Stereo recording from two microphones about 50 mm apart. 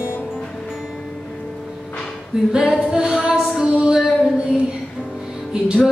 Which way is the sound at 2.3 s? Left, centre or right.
Centre.